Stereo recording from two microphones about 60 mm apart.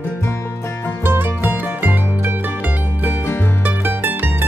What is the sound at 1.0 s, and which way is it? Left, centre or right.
Music, right.